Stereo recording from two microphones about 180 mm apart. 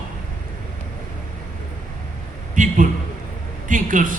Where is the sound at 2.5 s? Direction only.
45° right (ahead or behind).